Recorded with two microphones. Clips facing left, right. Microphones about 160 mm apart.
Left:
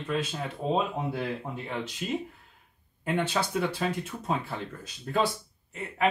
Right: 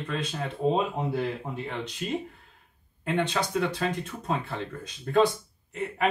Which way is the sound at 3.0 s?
5° left (ahead or behind).